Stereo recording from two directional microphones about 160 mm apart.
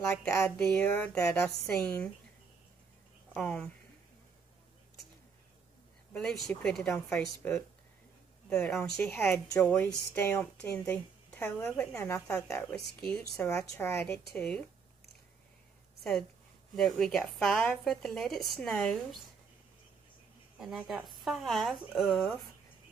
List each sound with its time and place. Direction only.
0.7 s a woman's voice: 10° left (ahead or behind)
3.3 s a woman's voice: 10° left (ahead or behind)
6.1 s a woman's voice: 5° left (ahead or behind); by 12.5 s 20° left (ahead or behind)
12.5 s a woman's voice: 5° left (ahead or behind)
16.0 s speech: centre (ahead or behind)
20.5 s speech: 5° right (ahead or behind)